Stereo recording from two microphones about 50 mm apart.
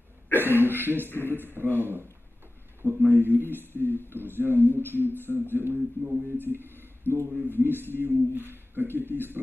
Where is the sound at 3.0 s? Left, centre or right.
Right.